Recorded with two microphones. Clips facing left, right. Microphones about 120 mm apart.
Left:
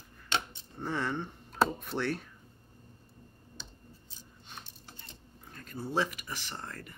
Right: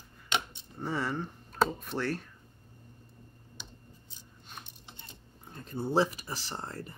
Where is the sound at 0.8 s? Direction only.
5° right (ahead or behind).